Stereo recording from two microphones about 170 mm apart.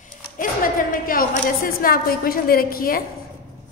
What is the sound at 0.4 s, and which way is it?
A woman's voice, 55° left (ahead or behind).